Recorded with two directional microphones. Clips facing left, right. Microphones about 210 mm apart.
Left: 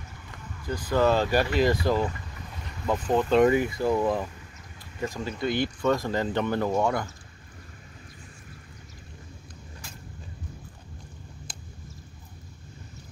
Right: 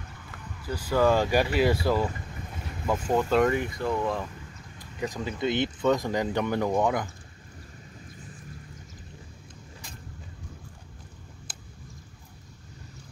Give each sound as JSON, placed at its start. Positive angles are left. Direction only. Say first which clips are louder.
{"t": 0.7, "sound": "speech", "louder": "even", "side_deg": -10}
{"t": 3.4, "sound": "speech", "louder": "left 4 dB", "side_deg": 5}
{"t": 4.7, "sound": "speech", "louder": "even", "side_deg": -15}
{"t": 11.5, "sound": "a sound", "louder": "left 2 dB", "side_deg": -5}